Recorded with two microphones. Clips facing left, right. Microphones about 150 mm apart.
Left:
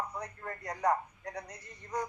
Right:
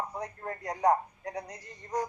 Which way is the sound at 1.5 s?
80° right.